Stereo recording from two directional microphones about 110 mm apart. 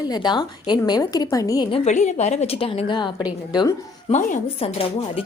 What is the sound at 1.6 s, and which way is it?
Speech, 75° left (ahead or behind).